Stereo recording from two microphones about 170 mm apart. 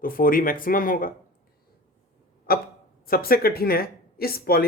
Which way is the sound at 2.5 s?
65° left (ahead or behind).